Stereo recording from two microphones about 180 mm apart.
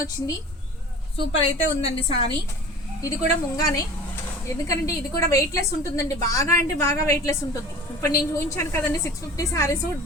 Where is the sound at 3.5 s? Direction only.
20° left (ahead or behind).